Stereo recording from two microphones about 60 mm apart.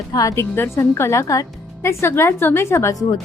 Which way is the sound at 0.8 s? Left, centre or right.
Left.